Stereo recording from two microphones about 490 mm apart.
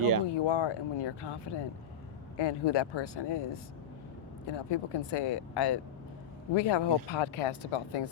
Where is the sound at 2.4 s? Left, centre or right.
Left.